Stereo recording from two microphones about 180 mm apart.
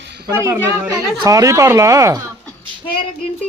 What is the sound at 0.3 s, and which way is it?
Speech, 15° right (ahead or behind).